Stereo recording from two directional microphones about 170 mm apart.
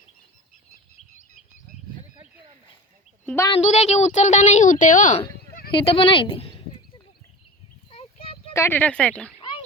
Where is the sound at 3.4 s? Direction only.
35° left (ahead or behind).